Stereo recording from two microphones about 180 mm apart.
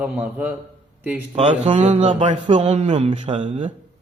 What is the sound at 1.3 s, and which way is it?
Speech, 40° right (ahead or behind).